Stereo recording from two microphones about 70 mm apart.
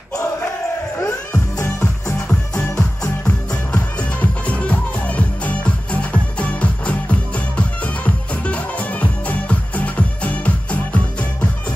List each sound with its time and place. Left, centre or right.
1.3 s music: left
3.3 s music: centre